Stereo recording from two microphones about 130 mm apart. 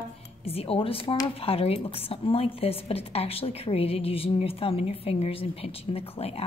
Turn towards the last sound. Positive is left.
turn(degrees=50)  # may be behind; listen again after turning